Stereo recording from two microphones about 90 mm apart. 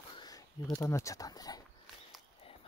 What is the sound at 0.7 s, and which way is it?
Speech, 35° left (ahead or behind).